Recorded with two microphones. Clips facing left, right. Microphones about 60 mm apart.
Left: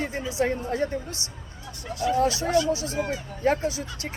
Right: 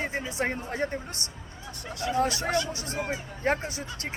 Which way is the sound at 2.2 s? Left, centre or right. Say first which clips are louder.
Left 3 dB; right.